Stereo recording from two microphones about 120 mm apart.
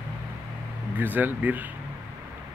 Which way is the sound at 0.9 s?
15° right (ahead or behind).